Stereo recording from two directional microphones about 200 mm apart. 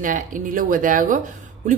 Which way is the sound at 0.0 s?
40° right (ahead or behind).